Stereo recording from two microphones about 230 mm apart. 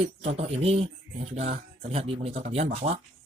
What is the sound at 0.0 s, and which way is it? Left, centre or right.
Speech, right.